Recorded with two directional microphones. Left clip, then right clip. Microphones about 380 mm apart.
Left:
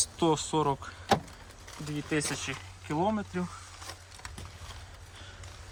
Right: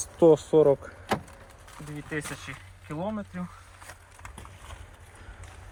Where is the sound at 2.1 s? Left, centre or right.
Centre.